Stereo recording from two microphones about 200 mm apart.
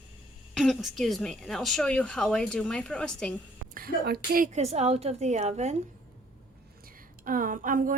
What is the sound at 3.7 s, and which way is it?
A woman's voice, 45° right (ahead or behind).